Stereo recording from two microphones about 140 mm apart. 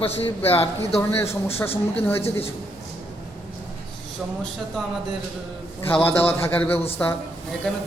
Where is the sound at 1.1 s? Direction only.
20° left (ahead or behind).